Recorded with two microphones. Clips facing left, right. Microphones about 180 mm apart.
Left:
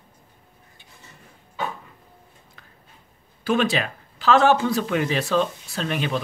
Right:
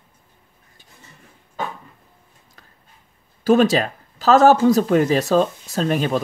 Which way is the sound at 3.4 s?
40° right (ahead or behind).